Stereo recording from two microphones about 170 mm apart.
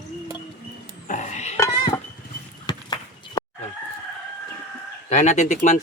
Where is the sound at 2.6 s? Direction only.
25° left (ahead or behind).